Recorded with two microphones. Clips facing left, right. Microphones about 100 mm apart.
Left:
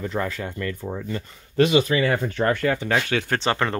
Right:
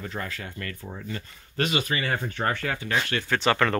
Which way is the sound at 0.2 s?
90° left.